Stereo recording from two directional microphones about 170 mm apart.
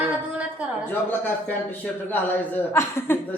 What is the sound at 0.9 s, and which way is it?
A woman's voice, 10° left (ahead or behind).